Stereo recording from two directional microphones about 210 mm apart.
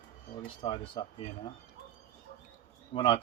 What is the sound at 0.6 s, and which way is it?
Speech, 25° left (ahead or behind).